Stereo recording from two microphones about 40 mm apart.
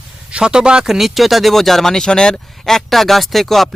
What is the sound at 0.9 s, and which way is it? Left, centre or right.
Speech, centre.